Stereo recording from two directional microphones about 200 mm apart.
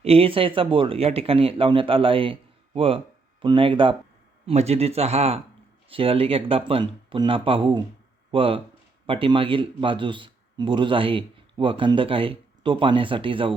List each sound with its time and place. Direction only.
0.0 s a man's voice: 30° right (ahead or behind)